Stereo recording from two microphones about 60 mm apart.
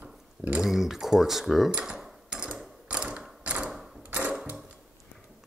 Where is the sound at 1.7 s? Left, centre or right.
Centre.